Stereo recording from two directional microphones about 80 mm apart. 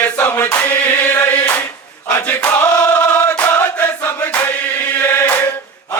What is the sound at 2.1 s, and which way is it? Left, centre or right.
Chant, left.